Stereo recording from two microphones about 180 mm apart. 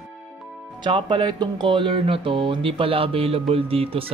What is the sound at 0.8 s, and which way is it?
Speech, 25° right (ahead or behind).